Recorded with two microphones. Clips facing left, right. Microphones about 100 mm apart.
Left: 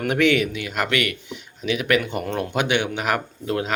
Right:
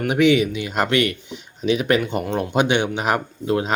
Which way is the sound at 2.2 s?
15° right (ahead or behind).